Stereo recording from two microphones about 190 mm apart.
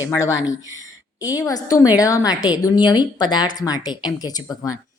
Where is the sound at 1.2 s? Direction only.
20° left (ahead or behind).